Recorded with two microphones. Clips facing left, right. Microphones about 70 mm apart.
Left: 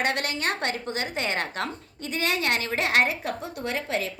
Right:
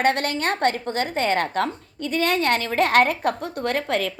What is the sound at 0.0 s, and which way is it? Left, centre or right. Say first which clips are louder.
A woman's voice: right 5 dB; right.